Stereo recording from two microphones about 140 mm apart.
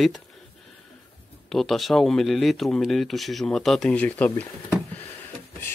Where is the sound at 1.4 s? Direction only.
Centre (ahead or behind).